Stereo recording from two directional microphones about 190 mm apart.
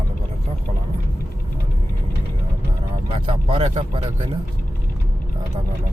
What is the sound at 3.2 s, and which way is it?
Speech, 30° right (ahead or behind).